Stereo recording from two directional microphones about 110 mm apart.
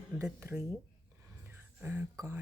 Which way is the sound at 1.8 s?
20° right (ahead or behind).